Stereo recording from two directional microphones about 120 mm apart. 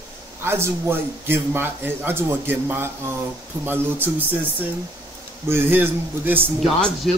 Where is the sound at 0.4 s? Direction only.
20° right (ahead or behind).